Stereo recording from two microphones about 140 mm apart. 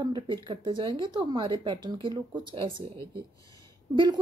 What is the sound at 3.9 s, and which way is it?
Speech, 30° right (ahead or behind).